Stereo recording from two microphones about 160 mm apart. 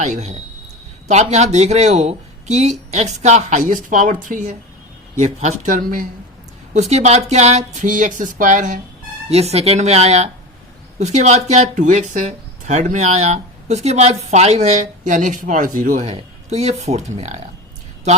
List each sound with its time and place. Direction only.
0.0 s speech: 45° right (ahead or behind)
6.7 s speech: 45° right (ahead or behind)
9.3 s speech: 40° right (ahead or behind)